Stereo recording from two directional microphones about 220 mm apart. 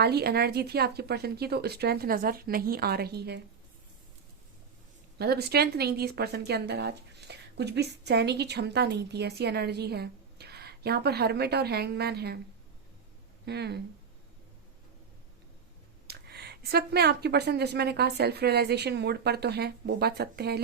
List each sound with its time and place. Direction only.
0.0 s a woman's voice: 45° right (ahead or behind)
5.1 s a woman's voice: 45° right (ahead or behind)
13.4 s speech: 50° right (ahead or behind)
16.0 s a woman's voice: 45° right (ahead or behind)